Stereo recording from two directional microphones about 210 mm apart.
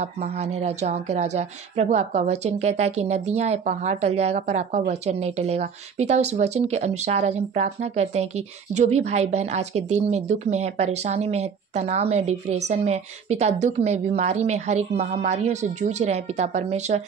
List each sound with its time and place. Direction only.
0.0 s speech: 30° right (ahead or behind)